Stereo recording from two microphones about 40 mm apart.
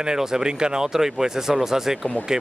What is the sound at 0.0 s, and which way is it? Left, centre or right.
Speech, centre.